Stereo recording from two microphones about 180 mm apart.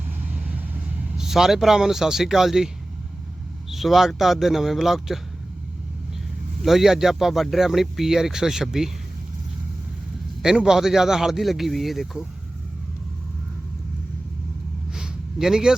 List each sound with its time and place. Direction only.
0.3 s vehicle: 10° right (ahead or behind)
1.2 s speech: centre (ahead or behind)
3.7 s speech: centre (ahead or behind)
6.6 s speech: centre (ahead or behind)
10.4 s speech: 5° right (ahead or behind)
14.9 s a sound: 5° right (ahead or behind)